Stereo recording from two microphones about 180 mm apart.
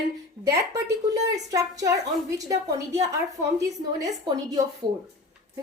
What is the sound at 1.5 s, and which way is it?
A woman's voice, 20° right (ahead or behind).